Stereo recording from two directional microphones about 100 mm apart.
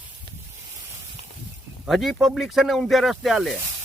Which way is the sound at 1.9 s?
Centre (ahead or behind).